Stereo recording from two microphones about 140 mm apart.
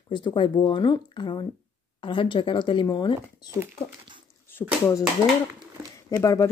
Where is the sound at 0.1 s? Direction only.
35° left (ahead or behind).